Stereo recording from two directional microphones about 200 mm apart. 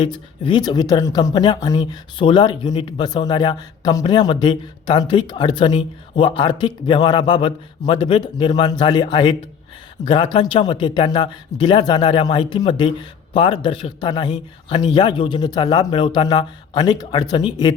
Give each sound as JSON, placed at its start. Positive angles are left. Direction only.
{"t": 0.0, "sound": "speech", "side_deg": 25}